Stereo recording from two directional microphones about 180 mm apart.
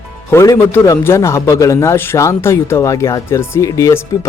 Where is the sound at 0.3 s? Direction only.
15° left (ahead or behind).